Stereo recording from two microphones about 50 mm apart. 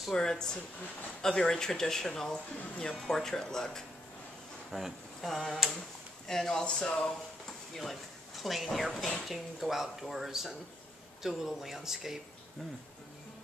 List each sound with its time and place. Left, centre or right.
0.1 s speech: centre
4.6 s speech: centre
7.7 s speech: centre